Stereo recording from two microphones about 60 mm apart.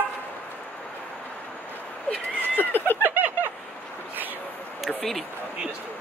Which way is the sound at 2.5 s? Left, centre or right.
Left.